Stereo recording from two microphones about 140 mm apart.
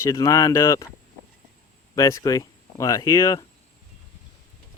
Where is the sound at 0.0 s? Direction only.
20° left (ahead or behind).